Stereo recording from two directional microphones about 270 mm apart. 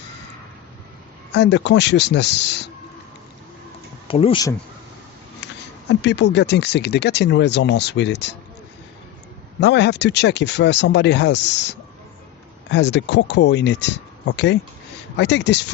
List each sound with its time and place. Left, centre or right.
1.3 s speech: left
4.1 s speech: centre
5.9 s speech: left
9.6 s speech: left